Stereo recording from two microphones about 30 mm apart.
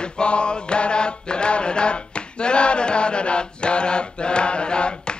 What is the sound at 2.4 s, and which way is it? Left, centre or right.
Mantra, left.